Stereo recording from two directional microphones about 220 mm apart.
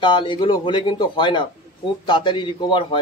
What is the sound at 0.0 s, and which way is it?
Speech, 20° left (ahead or behind).